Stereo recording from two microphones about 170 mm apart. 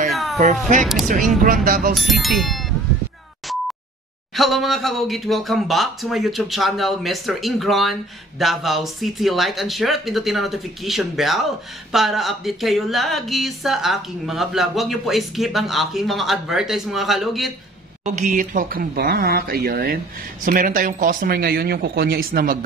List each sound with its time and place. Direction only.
0.1 s a sound: centre (ahead or behind)
1.4 s speech: 55° right (ahead or behind)
2.0 s speech: centre (ahead or behind)
4.4 s speech: centre (ahead or behind)
18.0 s speech: 45° right (ahead or behind)